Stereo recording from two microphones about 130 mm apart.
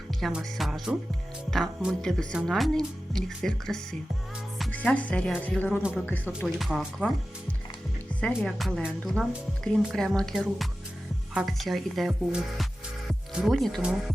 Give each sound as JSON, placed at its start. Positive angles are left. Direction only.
{"t": 0.2, "sound": "speech", "side_deg": 0}
{"t": 6.6, "sound": "speech", "side_deg": -5}
{"t": 8.4, "sound": "speech", "side_deg": 5}
{"t": 13.1, "sound": "music", "side_deg": 0}